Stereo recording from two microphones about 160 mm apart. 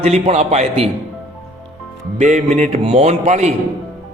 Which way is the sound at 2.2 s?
45° right (ahead or behind).